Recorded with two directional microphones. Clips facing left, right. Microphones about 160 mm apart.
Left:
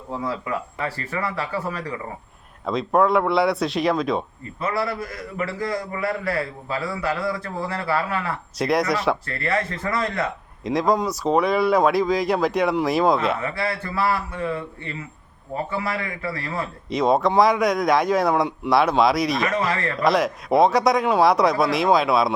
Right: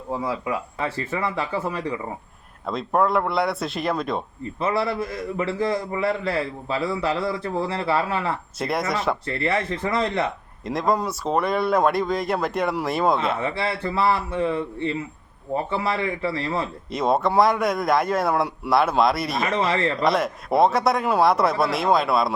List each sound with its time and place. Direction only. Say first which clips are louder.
0.1 s speech: right 1 dB; 10° right (ahead or behind)
0.9 s a man's voice: right 2 dB; 20° right (ahead or behind)
2.6 s speech: left 3 dB; centre (ahead or behind)
4.6 s a man's voice: right 2 dB; 25° right (ahead or behind)
8.5 s speech: left 6 dB; centre (ahead or behind)
9.2 s a man's voice: right 1 dB; 25° right (ahead or behind)
10.6 s speech: left 2 dB; centre (ahead or behind)
13.4 s a man's voice: right 1 dB; 25° right (ahead or behind)
16.9 s speech: left 2 dB; centre (ahead or behind)
19.5 s a man's voice: right 2 dB; 25° right (ahead or behind)
20.1 s speech: left 6 dB; centre (ahead or behind)